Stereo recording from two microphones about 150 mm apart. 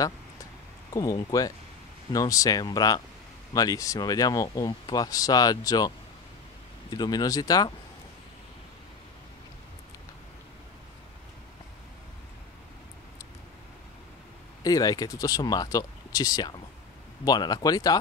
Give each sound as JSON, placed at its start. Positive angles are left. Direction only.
{"t": 0.9, "sound": "speech", "side_deg": 20}
{"t": 14.6, "sound": "speech", "side_deg": 25}